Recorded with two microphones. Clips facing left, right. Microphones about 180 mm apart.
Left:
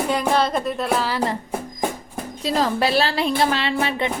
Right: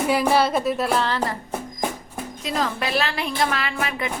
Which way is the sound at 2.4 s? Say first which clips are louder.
Left 5 dB; 30° left (ahead or behind).